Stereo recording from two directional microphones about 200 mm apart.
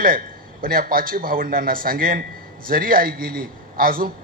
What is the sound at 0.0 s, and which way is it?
A man's voice, 45° right (ahead or behind).